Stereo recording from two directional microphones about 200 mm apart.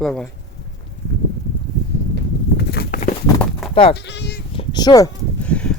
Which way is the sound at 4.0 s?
55° left (ahead or behind).